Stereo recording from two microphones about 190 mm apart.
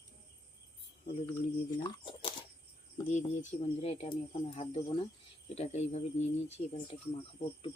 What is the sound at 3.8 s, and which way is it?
Speech, 35° left (ahead or behind).